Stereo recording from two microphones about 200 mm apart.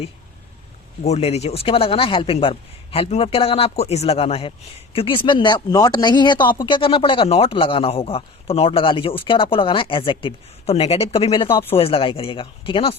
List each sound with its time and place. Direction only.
1.0 s speech: 30° left (ahead or behind)